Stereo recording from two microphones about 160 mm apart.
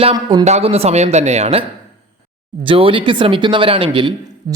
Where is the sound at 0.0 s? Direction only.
30° right (ahead or behind).